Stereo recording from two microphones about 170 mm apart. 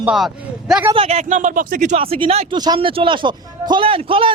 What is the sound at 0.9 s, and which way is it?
A man's voice, 40° right (ahead or behind).